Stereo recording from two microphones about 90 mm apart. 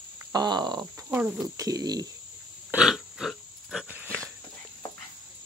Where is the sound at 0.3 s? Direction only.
50° right (ahead or behind).